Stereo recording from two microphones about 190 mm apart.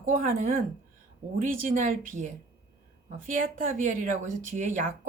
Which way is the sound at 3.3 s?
45° right (ahead or behind).